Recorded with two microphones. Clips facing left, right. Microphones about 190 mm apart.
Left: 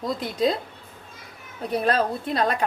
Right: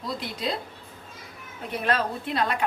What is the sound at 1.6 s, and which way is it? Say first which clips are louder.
Speech: left 4 dB; 35° left (ahead or behind).